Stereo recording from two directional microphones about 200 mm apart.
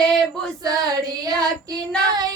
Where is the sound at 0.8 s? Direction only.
20° right (ahead or behind).